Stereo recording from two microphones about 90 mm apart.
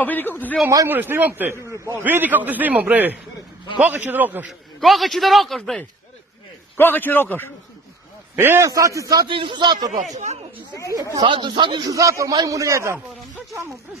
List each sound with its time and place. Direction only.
0.0 s a man's voice: 20° left (ahead or behind)
0.8 s a man's voice: 25° right (ahead or behind)
1.7 s a man's voice: 35° right (ahead or behind)
2.0 s a man's voice: 20° right (ahead or behind)
4.5 s a man's voice: centre (ahead or behind)
6.8 s a man's voice: 20° left (ahead or behind)
8.4 s a man's voice: 30° right (ahead or behind)
9.2 s a man's voice: 65° right (ahead or behind)
11.1 s a man's voice: 60° right (ahead or behind)
11.9 s a man's voice: 40° right (ahead or behind)